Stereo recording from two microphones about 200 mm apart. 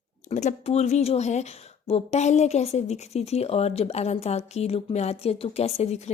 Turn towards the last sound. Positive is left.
turn(degrees=30)  # may be behind; listen again after turning